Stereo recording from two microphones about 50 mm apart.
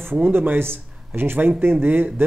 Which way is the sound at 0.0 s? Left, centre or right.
Right.